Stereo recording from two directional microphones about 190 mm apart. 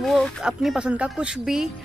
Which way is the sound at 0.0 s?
Centre (ahead or behind).